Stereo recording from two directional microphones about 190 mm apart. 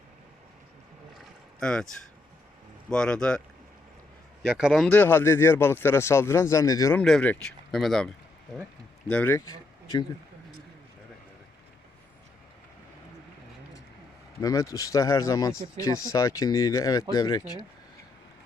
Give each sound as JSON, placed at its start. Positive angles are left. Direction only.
{"t": 1.5, "sound": "speech", "side_deg": 5}
{"t": 2.9, "sound": "speech", "side_deg": 5}
{"t": 4.4, "sound": "speech", "side_deg": 0}
{"t": 7.0, "sound": "speech", "side_deg": 5}
{"t": 14.4, "sound": "speech", "side_deg": 15}